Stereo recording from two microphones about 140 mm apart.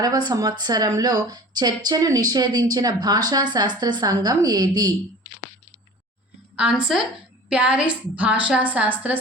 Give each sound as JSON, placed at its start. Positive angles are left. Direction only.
{"t": 0.0, "sound": "speech", "side_deg": -30}
{"t": 6.6, "sound": "a woman's voice", "side_deg": -5}